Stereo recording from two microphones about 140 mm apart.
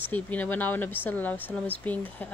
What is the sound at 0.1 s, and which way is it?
A woman's voice, 10° left (ahead or behind).